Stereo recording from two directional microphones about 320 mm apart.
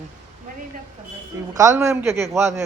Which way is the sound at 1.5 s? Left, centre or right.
Centre.